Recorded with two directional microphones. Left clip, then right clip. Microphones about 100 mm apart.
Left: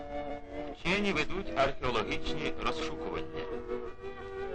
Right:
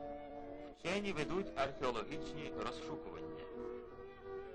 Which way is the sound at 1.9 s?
35° right (ahead or behind).